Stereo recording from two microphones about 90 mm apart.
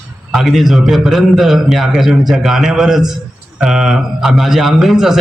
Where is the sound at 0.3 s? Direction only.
Centre (ahead or behind).